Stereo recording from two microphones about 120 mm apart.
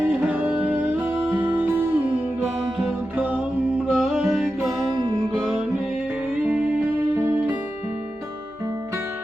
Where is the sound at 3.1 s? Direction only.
10° right (ahead or behind).